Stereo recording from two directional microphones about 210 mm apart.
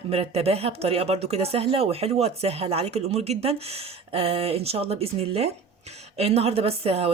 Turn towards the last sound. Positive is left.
turn(degrees=-30)  # may be behind; listen again after turning